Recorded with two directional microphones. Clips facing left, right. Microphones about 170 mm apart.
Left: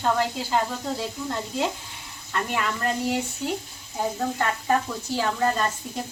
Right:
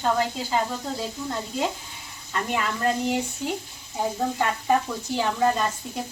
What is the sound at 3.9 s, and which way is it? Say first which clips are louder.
Speech: right 1 dB; 5° right (ahead or behind).